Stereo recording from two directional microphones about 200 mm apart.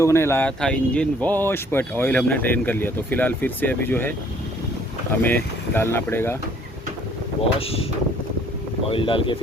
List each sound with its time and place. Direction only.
0.0 s speech: 15° left (ahead or behind)
5.2 s speech: 10° left (ahead or behind)
7.6 s speech: 30° left (ahead or behind)
8.9 s speech: 25° left (ahead or behind)